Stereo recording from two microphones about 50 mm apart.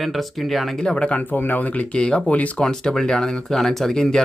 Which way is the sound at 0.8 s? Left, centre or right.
Centre.